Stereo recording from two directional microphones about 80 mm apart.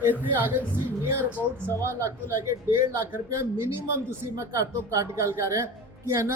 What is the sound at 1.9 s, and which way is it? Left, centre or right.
A woman's voice, right.